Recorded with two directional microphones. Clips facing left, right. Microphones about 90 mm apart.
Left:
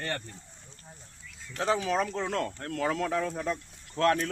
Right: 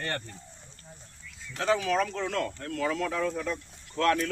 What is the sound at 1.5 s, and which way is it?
Speech, 25° left (ahead or behind).